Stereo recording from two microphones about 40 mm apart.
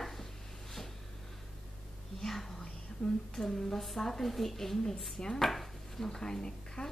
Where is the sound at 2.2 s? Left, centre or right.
Centre.